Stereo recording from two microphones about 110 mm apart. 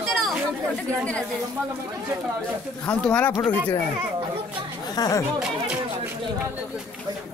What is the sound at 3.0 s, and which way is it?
Speech, 10° left (ahead or behind).